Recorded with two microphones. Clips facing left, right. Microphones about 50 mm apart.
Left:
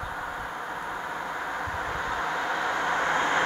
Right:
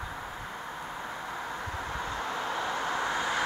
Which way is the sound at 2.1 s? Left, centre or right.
Left.